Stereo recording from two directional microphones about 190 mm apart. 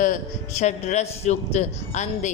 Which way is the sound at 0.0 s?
40° left (ahead or behind).